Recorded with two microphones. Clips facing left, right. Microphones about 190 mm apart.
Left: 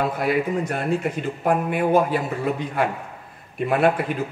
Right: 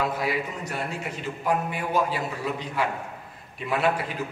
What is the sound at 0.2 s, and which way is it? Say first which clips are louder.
A man's voice: left 7 dB; 55° left (ahead or behind).